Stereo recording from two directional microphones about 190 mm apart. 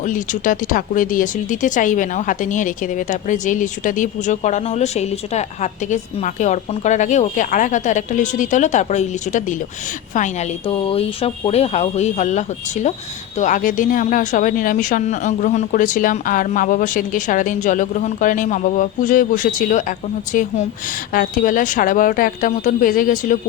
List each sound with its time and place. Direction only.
0.0 s speech: 45° left (ahead or behind)